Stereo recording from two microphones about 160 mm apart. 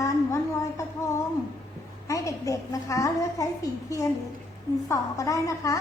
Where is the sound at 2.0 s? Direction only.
20° left (ahead or behind).